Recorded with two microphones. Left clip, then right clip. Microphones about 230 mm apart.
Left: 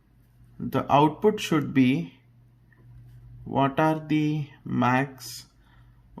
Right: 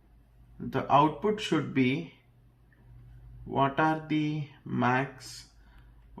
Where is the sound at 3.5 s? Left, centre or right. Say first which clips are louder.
Left 3 dB; left.